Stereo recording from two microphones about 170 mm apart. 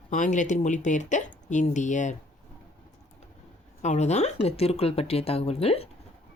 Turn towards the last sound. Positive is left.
turn(degrees=35)  # may be behind; listen again after turning